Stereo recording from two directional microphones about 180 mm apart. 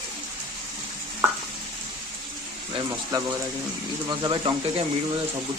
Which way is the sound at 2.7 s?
20° right (ahead or behind).